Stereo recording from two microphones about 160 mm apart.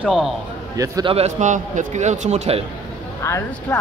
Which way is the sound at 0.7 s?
20° right (ahead or behind).